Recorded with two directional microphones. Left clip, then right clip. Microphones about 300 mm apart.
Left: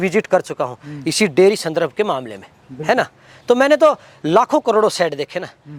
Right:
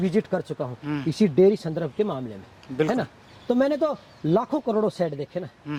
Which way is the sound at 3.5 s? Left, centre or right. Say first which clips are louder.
Left 11 dB; centre.